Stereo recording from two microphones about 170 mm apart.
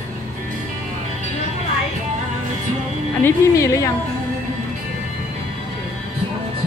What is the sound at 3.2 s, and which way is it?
Speech, 20° left (ahead or behind).